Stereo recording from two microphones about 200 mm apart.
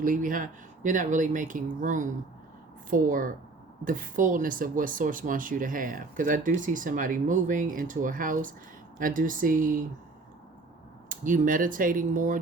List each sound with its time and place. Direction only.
0.0 s speech: 45° right (ahead or behind)
11.1 s speech: 40° right (ahead or behind)